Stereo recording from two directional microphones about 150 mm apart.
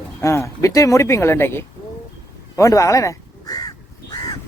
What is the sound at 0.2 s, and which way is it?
Speech, 20° left (ahead or behind).